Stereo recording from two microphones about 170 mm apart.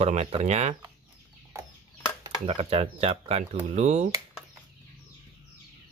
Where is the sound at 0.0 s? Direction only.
40° right (ahead or behind).